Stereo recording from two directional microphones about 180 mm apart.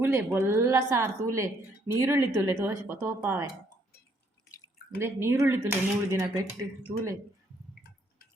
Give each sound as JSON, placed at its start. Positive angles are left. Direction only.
{"t": 0.0, "sound": "a woman's voice", "side_deg": -10}
{"t": 4.9, "sound": "a woman's voice", "side_deg": -15}